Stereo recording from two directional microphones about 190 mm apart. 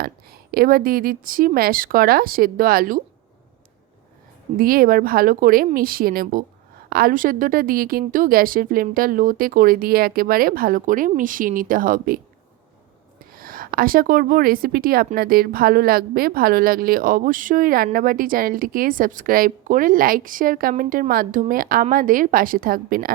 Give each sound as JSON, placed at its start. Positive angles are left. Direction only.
{"t": 0.0, "sound": "speech", "side_deg": -50}
{"t": 4.5, "sound": "speech", "side_deg": -50}
{"t": 13.3, "sound": "speech", "side_deg": -50}